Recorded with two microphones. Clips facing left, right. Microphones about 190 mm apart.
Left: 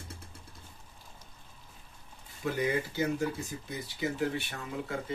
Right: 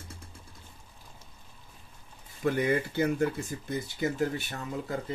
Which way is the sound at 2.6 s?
55° right (ahead or behind).